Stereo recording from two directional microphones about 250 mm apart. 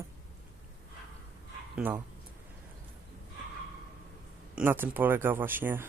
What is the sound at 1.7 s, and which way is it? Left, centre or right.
Speech, centre.